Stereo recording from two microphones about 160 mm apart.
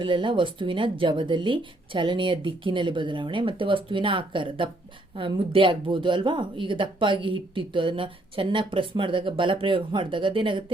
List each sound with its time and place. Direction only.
0.0 s speech: 30° right (ahead or behind)